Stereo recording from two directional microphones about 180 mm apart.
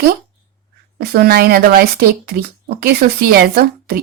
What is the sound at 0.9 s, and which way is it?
A woman's voice, 60° right (ahead or behind).